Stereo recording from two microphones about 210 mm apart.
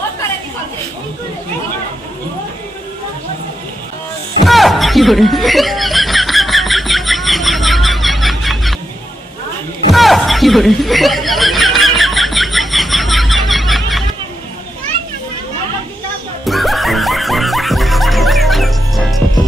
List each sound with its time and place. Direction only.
4.5 s snicker: centre (ahead or behind)
9.8 s snicker: centre (ahead or behind)
16.4 s music: centre (ahead or behind)